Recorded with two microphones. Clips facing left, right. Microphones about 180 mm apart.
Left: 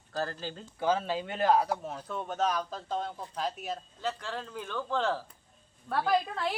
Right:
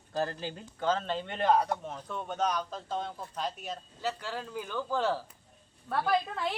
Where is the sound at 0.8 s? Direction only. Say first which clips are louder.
Left 1 dB; 10° left (ahead or behind).